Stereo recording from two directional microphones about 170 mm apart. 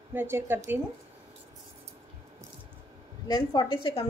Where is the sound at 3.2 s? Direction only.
25° left (ahead or behind).